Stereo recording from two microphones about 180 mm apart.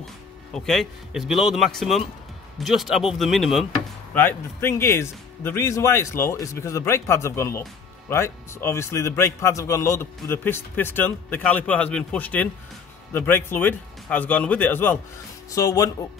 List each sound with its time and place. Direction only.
0.6 s speech: centre (ahead or behind)
4.1 s a man's voice: 10° left (ahead or behind)